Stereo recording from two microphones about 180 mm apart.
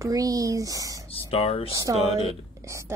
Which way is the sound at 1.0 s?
30° left (ahead or behind).